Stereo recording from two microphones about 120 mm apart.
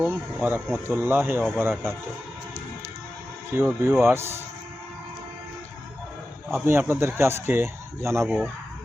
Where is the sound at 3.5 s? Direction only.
15° right (ahead or behind).